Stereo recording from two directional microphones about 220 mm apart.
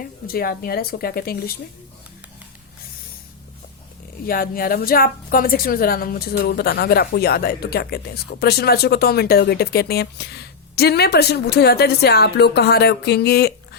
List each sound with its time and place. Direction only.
0.0 s a woman's voice: 40° left (ahead or behind)
4.3 s a woman's voice: 40° left (ahead or behind)